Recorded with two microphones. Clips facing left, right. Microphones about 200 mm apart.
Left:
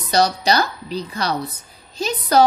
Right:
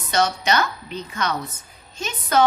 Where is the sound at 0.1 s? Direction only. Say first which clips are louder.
Left 3 dB; 35° left (ahead or behind).